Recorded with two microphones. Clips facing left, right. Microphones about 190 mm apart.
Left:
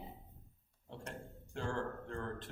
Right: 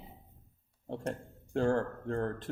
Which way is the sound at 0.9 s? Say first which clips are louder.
Right 10 dB; 45° right (ahead or behind).